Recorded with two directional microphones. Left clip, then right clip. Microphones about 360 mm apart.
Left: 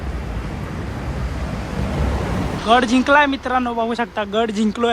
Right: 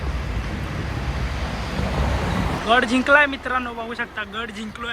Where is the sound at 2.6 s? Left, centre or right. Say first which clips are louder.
Left 3 dB; centre.